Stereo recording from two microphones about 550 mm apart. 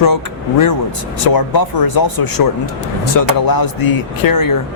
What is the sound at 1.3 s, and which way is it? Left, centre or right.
Speech, left.